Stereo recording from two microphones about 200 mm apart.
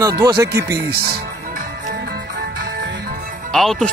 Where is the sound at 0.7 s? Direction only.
50° right (ahead or behind).